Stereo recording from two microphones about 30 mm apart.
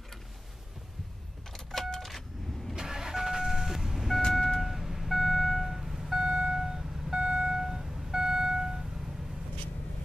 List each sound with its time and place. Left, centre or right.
1.5 s vehicle: centre
2.7 s vehicle: centre
7.2 s beep: right
7.5 s a sound: centre